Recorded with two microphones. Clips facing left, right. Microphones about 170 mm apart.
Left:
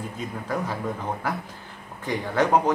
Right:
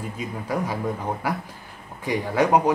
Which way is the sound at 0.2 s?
10° right (ahead or behind).